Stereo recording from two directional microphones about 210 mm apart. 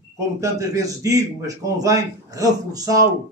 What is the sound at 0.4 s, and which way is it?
A man's voice, 15° right (ahead or behind).